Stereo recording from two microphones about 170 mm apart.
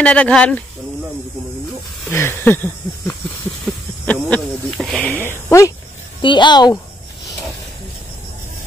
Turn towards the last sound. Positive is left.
turn(degrees=25)  # may be behind; listen again after turning